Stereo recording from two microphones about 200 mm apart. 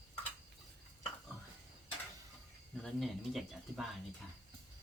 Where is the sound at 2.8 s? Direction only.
Centre (ahead or behind).